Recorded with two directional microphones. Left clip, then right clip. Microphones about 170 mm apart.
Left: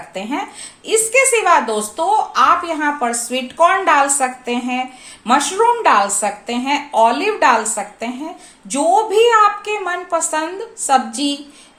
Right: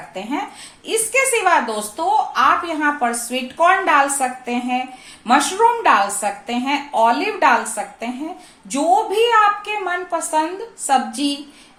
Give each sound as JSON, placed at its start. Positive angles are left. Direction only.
{"t": 0.1, "sound": "a woman's voice", "side_deg": 25}